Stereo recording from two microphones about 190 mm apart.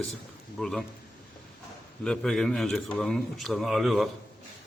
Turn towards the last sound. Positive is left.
turn(degrees=0)  # may be behind; listen again after turning